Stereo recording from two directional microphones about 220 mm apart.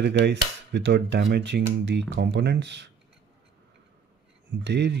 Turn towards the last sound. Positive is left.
turn(degrees=-50)  # may be behind; listen again after turning